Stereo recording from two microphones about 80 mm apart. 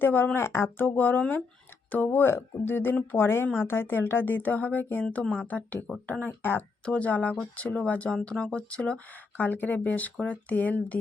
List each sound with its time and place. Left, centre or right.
0.0 s speech: left
5.0 s speech: centre